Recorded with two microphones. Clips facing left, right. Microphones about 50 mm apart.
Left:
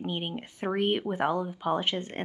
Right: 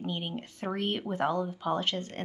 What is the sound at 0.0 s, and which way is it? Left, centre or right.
Speech, left.